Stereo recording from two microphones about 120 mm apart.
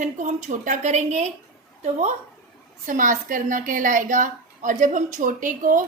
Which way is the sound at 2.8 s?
90° right.